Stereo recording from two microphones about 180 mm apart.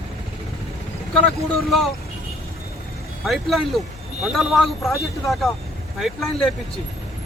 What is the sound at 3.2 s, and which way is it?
Speech, centre (ahead or behind).